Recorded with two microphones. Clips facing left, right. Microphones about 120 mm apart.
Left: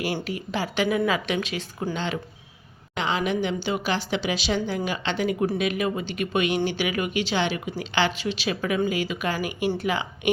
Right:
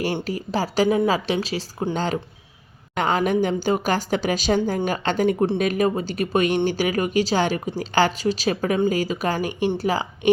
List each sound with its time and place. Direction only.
0.3 s a woman's voice: 40° right (ahead or behind)